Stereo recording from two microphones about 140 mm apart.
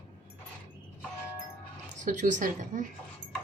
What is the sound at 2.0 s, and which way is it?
Speech, 65° right (ahead or behind).